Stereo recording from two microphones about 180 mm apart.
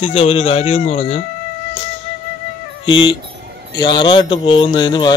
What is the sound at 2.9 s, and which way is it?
Speech, 25° left (ahead or behind).